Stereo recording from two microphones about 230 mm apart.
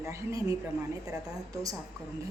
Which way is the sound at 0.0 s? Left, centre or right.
Centre.